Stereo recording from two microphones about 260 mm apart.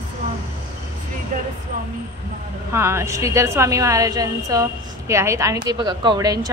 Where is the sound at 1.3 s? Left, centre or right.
Right.